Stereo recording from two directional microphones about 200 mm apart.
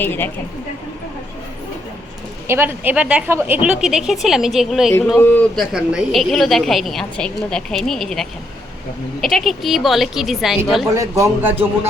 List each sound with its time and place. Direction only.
0.0 s speech: 10° left (ahead or behind)
2.5 s a woman's voice: 10° right (ahead or behind)
10.9 s a man's voice: 15° right (ahead or behind)